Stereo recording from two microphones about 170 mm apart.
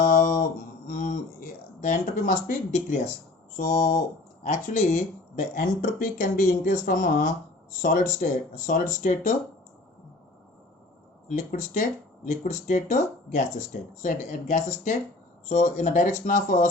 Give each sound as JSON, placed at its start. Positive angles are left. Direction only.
{"t": 0.0, "sound": "guitar", "side_deg": 45}
{"t": 0.9, "sound": "a sound", "side_deg": 45}
{"t": 1.8, "sound": "speech", "side_deg": 45}
{"t": 11.3, "sound": "speech", "side_deg": 45}